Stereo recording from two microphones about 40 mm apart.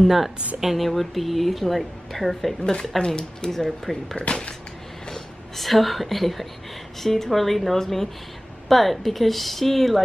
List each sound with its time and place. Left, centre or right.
0.0 s a woman's voice: centre
2.6 s a woman's voice: centre